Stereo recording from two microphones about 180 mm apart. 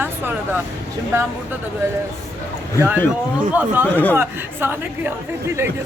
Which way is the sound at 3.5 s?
10° right (ahead or behind).